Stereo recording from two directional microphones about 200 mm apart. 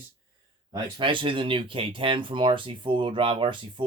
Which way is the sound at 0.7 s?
25° right (ahead or behind).